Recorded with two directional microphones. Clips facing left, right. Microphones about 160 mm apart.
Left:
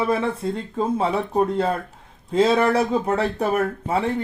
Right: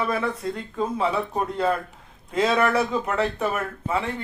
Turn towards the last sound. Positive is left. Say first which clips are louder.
# left 4 dB
turn(degrees=35)  # may be behind; listen again after turning